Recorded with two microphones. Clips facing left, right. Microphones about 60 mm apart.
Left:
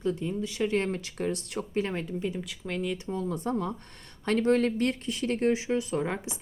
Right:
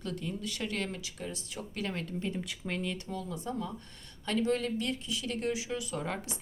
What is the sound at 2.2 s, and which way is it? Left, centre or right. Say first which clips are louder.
Speech: left 3 dB; centre.